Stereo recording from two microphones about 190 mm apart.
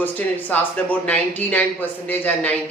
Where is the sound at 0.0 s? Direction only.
10° left (ahead or behind).